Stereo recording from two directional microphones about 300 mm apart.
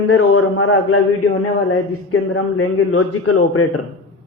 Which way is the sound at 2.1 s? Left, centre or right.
Left.